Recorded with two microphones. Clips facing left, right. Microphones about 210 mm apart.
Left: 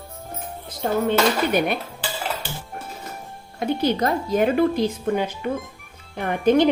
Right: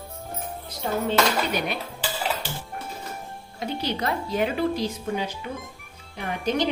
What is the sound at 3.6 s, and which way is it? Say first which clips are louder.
Speech: left 7 dB; 45° left (ahead or behind).